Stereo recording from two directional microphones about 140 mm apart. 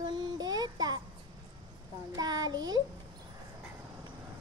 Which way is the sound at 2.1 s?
25° right (ahead or behind).